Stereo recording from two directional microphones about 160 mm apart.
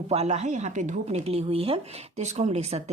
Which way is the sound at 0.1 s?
45° right (ahead or behind).